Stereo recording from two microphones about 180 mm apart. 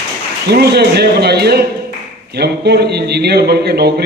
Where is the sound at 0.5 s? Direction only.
65° right (ahead or behind).